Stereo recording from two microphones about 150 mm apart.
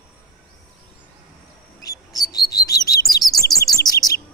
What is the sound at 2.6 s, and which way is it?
Chirp, 25° left (ahead or behind).